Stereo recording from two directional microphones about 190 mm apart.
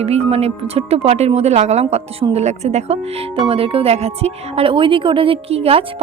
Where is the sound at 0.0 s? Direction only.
30° right (ahead or behind).